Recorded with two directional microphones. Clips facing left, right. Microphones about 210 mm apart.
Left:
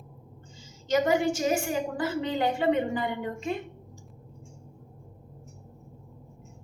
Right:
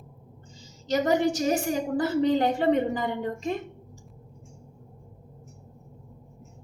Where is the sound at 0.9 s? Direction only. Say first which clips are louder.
Right 1 dB; 35° right (ahead or behind).